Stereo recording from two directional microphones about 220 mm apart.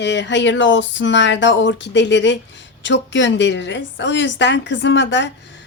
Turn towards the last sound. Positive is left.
turn(degrees=55)  # may be behind; listen again after turning